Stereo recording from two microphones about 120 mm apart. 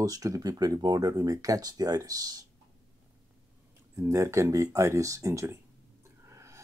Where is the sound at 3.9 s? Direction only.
25° right (ahead or behind).